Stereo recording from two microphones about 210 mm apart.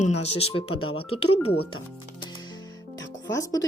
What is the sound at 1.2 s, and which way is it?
Speech, 90° left.